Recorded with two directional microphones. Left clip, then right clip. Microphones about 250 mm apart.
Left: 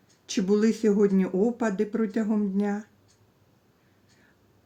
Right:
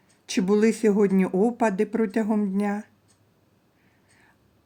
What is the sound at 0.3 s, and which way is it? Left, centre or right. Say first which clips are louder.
Speech: right 3 dB; right.